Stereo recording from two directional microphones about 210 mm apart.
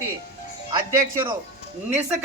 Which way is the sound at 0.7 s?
15° right (ahead or behind).